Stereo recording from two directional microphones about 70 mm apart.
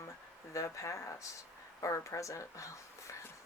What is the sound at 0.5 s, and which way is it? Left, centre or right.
Speech, left.